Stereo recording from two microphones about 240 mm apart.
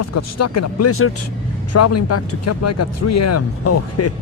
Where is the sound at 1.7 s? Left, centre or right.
Left.